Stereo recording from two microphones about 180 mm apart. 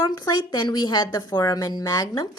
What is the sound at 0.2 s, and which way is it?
A woman's voice, 20° left (ahead or behind).